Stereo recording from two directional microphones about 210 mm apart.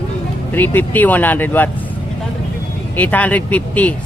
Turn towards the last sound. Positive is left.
turn(degrees=5)  # may be behind; listen again after turning